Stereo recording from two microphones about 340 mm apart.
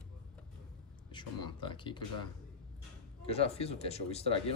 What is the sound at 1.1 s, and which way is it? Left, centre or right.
Speech, centre.